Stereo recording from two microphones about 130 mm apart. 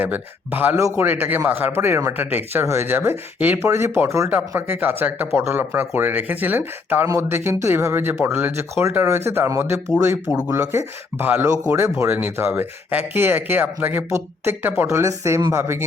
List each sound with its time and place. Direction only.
0.0 s speech: 15° right (ahead or behind)